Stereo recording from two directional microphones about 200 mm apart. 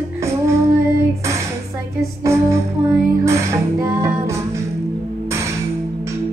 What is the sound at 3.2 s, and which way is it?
Music, 15° right (ahead or behind).